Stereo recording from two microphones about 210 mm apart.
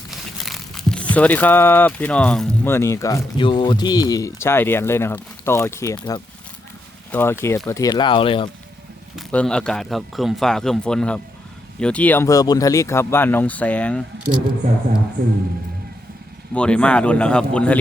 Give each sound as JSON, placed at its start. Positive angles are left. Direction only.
{"t": 0.1, "sound": "speech", "side_deg": 0}
{"t": 9.1, "sound": "speech", "side_deg": 5}
{"t": 15.2, "sound": "speech", "side_deg": -45}
{"t": 16.6, "sound": "speech", "side_deg": 5}